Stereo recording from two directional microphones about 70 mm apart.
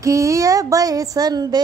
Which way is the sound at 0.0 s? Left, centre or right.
Right.